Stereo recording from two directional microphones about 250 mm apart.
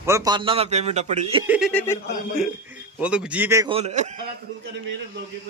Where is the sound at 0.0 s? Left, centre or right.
Centre.